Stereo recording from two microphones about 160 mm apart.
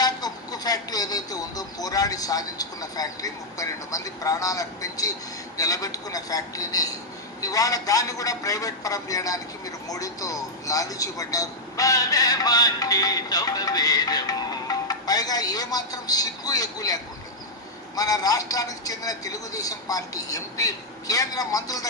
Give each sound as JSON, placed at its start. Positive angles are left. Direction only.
{"t": 0.0, "sound": "speech", "side_deg": 25}